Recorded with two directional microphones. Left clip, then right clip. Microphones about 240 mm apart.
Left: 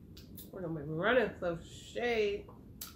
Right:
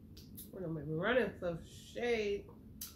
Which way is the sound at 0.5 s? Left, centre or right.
Centre.